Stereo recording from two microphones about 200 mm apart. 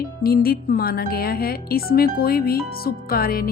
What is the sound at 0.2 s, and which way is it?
Speech, 50° left (ahead or behind).